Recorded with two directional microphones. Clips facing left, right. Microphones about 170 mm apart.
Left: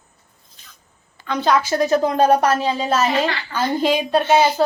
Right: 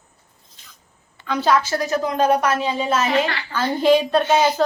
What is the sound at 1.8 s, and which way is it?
A woman's voice, 30° left (ahead or behind).